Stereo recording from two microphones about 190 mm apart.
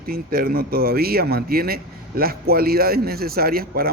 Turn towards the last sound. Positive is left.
turn(degrees=-50)  # may be behind; listen again after turning